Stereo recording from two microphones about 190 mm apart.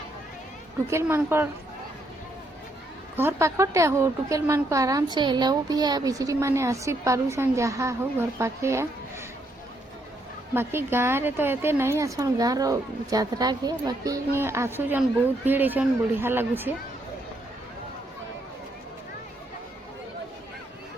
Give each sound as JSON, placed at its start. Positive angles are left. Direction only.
{"t": 0.9, "sound": "a woman's voice", "side_deg": -15}
{"t": 3.2, "sound": "a woman's voice", "side_deg": -15}
{"t": 10.5, "sound": "a woman's voice", "side_deg": -10}